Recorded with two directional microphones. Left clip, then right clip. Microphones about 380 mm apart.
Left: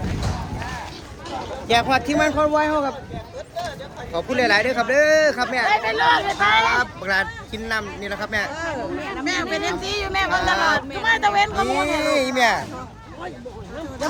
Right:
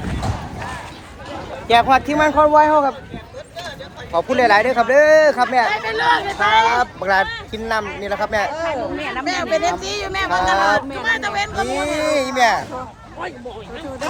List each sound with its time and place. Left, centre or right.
1.6 s speech: centre
4.1 s speech: centre
5.7 s speech: left
6.7 s speech: centre
10.2 s speech: centre
11.0 s speech: centre
11.6 s speech: centre